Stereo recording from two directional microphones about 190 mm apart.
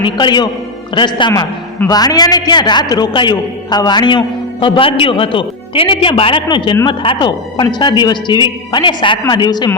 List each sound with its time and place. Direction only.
0.0 s a man's voice: 25° left (ahead or behind)